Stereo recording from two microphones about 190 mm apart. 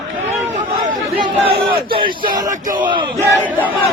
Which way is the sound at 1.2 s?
30° right (ahead or behind).